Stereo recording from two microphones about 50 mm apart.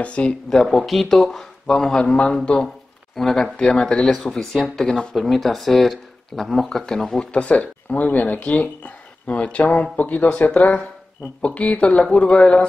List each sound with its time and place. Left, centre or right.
0.0 s speech: left
0.5 s speech: centre
4.2 s speech: centre
4.8 s speech: centre
5.1 s speech: centre
7.2 s speech: left